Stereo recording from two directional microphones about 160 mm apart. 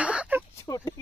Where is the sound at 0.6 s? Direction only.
20° left (ahead or behind).